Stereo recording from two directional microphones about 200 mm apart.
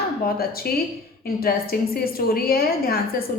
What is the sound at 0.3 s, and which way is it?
A woman's voice, 50° left (ahead or behind).